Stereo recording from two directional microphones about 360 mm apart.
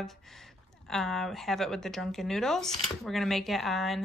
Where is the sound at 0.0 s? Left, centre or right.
Centre.